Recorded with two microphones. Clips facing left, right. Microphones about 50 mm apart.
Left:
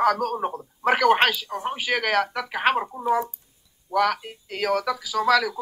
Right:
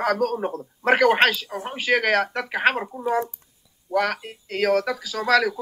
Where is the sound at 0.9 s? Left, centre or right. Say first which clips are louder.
Right 2 dB; centre.